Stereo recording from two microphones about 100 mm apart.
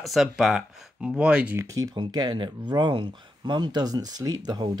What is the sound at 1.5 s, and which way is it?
Speech, 35° right (ahead or behind).